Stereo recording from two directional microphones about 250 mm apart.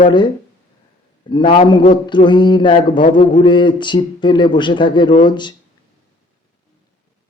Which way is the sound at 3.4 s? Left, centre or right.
Centre.